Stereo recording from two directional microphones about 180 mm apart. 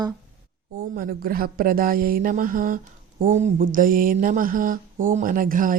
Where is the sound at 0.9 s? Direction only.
55° right (ahead or behind).